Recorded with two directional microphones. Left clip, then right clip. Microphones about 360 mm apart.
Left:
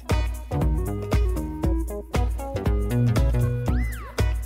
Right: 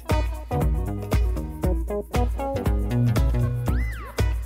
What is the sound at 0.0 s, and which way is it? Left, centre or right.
Music, centre.